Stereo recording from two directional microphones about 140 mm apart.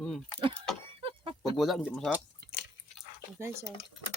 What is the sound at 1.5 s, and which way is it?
Speech, centre (ahead or behind).